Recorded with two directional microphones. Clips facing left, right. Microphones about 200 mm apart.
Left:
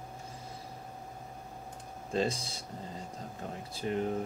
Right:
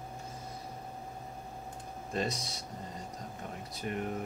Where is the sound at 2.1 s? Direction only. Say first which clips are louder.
Left 3 dB; 30° left (ahead or behind).